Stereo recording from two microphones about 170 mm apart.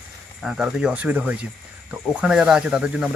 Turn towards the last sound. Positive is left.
turn(degrees=-5)  # may be behind; listen again after turning